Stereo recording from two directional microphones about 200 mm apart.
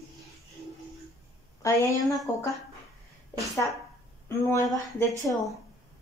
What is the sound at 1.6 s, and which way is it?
Speech, 15° left (ahead or behind).